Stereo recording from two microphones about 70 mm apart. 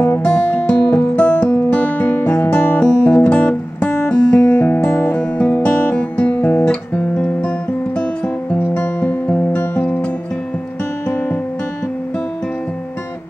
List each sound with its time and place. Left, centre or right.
0.0 s music: left
4.8 s guitar: centre
8.5 s music: left
11.1 s music: left